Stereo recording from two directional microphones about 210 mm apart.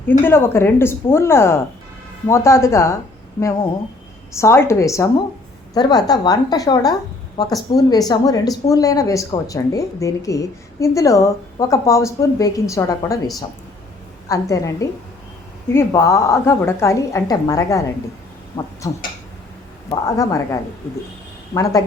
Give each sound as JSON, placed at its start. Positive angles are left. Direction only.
{"t": 0.1, "sound": "speech", "side_deg": 10}
{"t": 4.4, "sound": "a woman's voice", "side_deg": 10}
{"t": 14.3, "sound": "speech", "side_deg": 15}
{"t": 19.9, "sound": "speech", "side_deg": 15}